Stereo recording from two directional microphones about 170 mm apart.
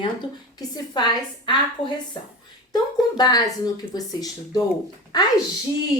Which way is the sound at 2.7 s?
25° left (ahead or behind).